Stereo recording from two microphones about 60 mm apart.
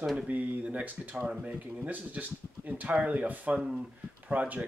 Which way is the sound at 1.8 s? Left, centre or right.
Right.